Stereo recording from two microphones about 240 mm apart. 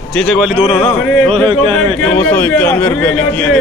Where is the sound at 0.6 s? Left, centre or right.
Centre.